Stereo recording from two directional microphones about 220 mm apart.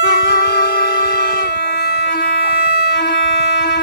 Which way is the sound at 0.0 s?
50° left (ahead or behind).